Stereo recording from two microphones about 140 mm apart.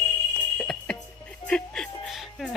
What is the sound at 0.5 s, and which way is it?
Fire alarm, 5° left (ahead or behind).